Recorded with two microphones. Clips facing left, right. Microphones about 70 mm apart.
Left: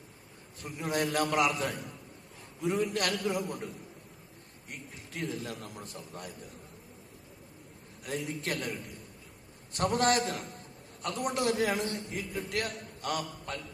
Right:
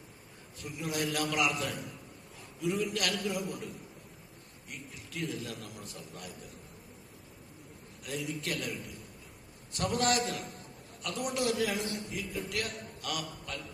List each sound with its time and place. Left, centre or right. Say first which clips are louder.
0.6 s a man's voice: left 3 dB; left
5.1 s a man's voice: left 1 dB; left
8.0 s a man's voice: left 2 dB; left
9.7 s a man's voice: left 3 dB; left